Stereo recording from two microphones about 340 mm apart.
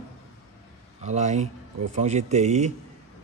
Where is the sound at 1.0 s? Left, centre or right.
Centre.